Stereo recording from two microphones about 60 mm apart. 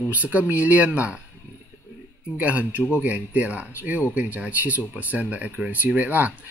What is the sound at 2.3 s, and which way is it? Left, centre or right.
Speech, right.